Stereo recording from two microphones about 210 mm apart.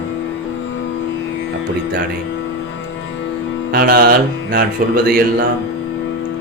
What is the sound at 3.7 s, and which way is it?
Speech, 50° right (ahead or behind).